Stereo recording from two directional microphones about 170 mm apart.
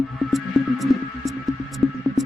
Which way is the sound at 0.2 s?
Centre (ahead or behind).